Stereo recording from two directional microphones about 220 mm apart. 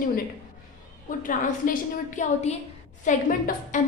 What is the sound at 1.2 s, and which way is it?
A woman's voice, 40° left (ahead or behind).